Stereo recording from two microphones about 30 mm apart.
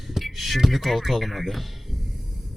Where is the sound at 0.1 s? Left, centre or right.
Centre.